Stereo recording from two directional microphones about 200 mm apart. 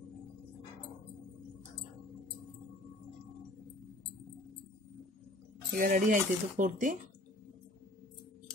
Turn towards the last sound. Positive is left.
turn(degrees=-40)  # may be behind; listen again after turning